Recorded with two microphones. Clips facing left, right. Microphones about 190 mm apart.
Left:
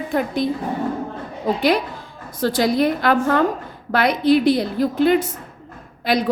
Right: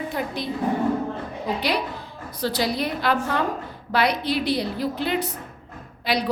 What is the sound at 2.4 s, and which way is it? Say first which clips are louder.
A woman's voice: left 7 dB; 50° left (ahead or behind).